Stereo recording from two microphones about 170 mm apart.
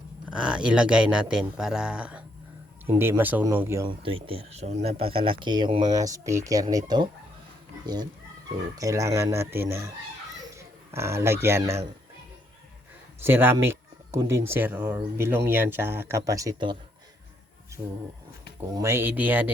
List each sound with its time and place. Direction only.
0.3 s speech: 5° right (ahead or behind)
3.8 s speech: 30° right (ahead or behind)
8.8 s speech: 20° right (ahead or behind)
13.2 s speech: 10° right (ahead or behind)
18.7 s speech: 15° right (ahead or behind)